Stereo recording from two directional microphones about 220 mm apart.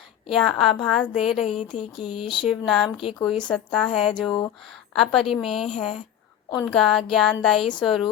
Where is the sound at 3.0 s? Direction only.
25° left (ahead or behind).